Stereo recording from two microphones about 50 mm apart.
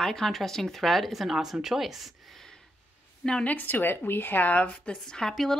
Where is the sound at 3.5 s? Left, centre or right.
Left.